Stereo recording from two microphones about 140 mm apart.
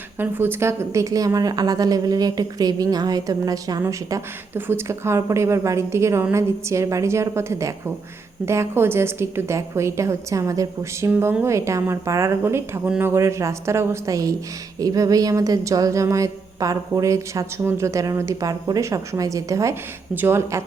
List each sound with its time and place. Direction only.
0.2 s a woman's voice: 15° right (ahead or behind)
11.1 s a woman's voice: 15° right (ahead or behind)